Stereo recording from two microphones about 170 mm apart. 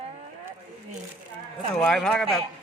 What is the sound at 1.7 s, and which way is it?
Speech, 5° left (ahead or behind).